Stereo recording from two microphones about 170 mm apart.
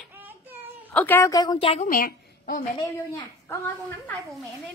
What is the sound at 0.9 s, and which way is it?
Speech, 15° left (ahead or behind).